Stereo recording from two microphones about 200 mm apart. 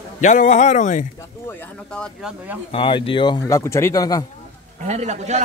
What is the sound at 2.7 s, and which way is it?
A man's voice, 25° left (ahead or behind).